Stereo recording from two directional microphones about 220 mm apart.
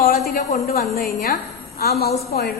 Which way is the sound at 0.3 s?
40° left (ahead or behind).